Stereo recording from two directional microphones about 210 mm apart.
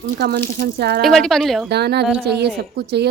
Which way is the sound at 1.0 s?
Centre (ahead or behind).